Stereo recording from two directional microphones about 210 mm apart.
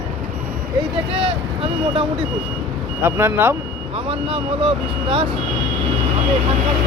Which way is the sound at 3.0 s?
10° right (ahead or behind).